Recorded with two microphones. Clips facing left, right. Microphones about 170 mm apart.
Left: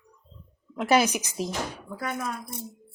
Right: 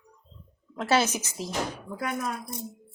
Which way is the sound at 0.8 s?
15° left (ahead or behind).